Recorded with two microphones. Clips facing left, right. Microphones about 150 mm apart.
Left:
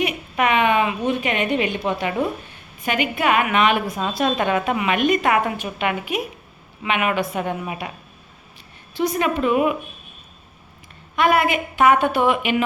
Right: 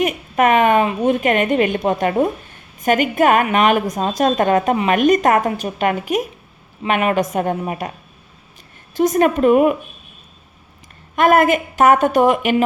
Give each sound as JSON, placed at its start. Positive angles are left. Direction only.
{"t": 0.0, "sound": "a woman's voice", "side_deg": -45}
{"t": 9.0, "sound": "a woman's voice", "side_deg": -45}
{"t": 11.2, "sound": "a woman's voice", "side_deg": -45}